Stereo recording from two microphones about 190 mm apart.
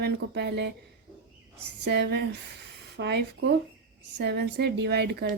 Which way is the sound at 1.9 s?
65° right (ahead or behind).